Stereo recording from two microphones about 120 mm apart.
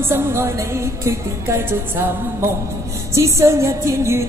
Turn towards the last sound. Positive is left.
turn(degrees=-25)  # may be behind; listen again after turning